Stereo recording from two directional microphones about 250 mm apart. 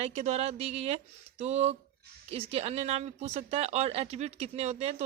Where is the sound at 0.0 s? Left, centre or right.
Right.